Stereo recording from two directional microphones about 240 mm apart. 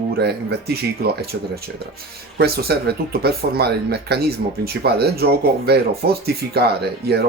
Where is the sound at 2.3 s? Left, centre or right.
Right.